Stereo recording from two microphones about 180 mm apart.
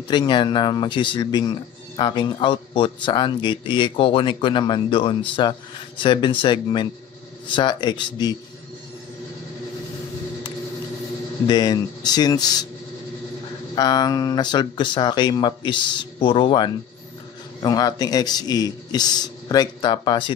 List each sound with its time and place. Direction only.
0.1 s speech: 25° left (ahead or behind)
11.4 s speech: 20° left (ahead or behind)
13.7 s speech: 20° left (ahead or behind)